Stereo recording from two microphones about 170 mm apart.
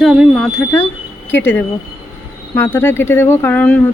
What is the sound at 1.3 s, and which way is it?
Speech, 10° left (ahead or behind).